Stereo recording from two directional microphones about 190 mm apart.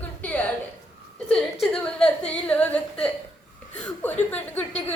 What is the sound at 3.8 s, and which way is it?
Chuckle, 5° left (ahead or behind).